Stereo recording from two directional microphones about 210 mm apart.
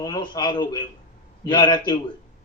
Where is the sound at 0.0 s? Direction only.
20° left (ahead or behind).